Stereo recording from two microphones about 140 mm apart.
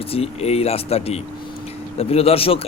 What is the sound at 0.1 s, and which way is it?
A man's voice, 45° left (ahead or behind).